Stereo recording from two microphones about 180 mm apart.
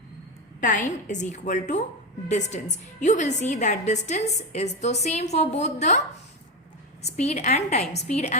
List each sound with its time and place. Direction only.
0.6 s a woman's voice: 45° left (ahead or behind)
3.0 s a woman's voice: 40° left (ahead or behind)
7.0 s a woman's voice: 40° left (ahead or behind)